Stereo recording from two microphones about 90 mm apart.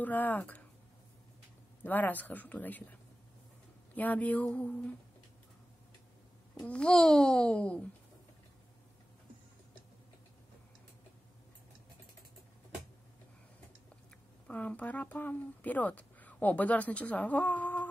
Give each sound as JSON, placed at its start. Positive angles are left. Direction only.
{"t": 0.0, "sound": "speech", "side_deg": 20}
{"t": 1.8, "sound": "speech", "side_deg": 20}
{"t": 6.6, "sound": "speech", "side_deg": 10}
{"t": 14.5, "sound": "speech", "side_deg": 15}